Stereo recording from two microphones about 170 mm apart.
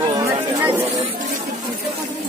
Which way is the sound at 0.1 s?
20° right (ahead or behind).